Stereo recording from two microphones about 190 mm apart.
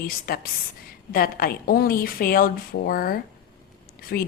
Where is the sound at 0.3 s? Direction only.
50° left (ahead or behind).